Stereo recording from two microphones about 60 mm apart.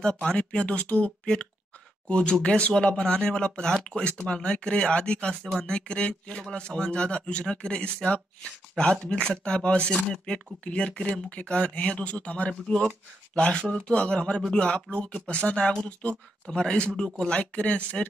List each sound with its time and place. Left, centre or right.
0.0 s speech: centre